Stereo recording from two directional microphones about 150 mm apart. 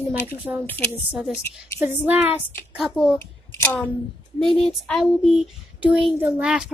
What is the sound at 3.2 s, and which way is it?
Speech, 15° left (ahead or behind).